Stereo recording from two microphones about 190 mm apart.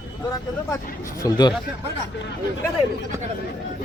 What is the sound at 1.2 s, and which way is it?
Speech, 20° left (ahead or behind).